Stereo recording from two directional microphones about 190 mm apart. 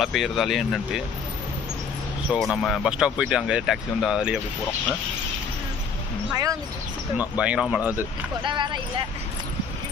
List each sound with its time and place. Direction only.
0.0 s speech: centre (ahead or behind)
2.4 s speech: centre (ahead or behind)
6.3 s speech: 15° right (ahead or behind)
7.2 s speech: 5° right (ahead or behind)
8.4 s speech: 25° right (ahead or behind)